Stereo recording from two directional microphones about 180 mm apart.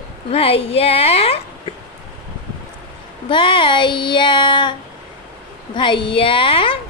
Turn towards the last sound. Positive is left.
turn(degrees=30)  # may be behind; listen again after turning